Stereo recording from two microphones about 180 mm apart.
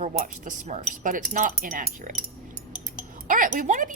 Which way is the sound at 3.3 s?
50° right (ahead or behind).